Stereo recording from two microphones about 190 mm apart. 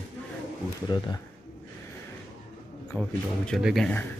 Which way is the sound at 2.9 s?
5° left (ahead or behind).